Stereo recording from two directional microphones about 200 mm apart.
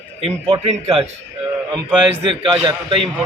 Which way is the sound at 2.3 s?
20° right (ahead or behind).